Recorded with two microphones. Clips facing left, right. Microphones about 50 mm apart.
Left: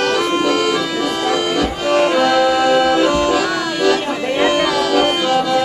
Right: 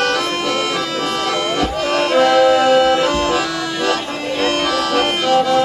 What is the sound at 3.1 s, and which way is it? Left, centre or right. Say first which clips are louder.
Accordion: left 2 dB; right.